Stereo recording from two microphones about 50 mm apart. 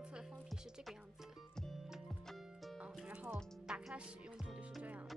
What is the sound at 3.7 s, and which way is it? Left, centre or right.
Music, centre.